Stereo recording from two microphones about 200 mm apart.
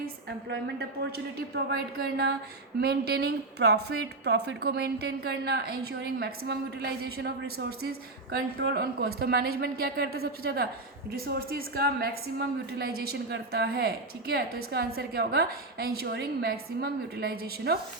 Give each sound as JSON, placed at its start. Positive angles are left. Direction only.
{"t": 0.0, "sound": "a woman's voice", "side_deg": -55}